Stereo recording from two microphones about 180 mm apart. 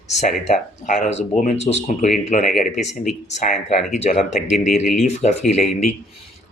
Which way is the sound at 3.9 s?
40° left (ahead or behind).